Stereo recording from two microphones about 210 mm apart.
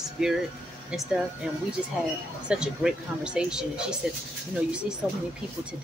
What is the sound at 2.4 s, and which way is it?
Speech, 5° right (ahead or behind).